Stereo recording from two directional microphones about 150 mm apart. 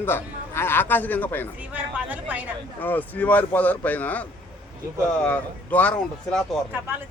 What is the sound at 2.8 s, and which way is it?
Speech, 10° left (ahead or behind).